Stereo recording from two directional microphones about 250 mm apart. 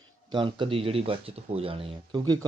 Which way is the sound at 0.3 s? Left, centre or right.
Centre.